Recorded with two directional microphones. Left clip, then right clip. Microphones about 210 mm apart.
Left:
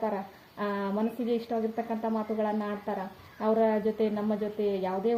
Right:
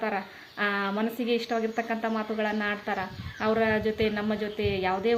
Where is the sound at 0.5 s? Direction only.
10° right (ahead or behind).